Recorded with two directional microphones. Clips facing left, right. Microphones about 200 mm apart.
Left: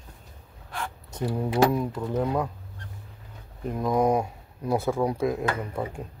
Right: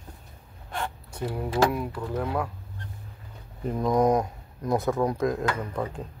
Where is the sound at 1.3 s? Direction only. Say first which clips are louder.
Left 2 dB; 20° left (ahead or behind).